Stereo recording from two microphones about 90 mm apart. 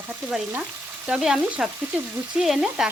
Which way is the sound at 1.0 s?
10° right (ahead or behind).